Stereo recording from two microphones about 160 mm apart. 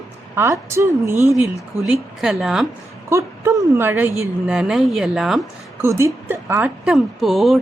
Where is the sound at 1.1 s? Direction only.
20° left (ahead or behind).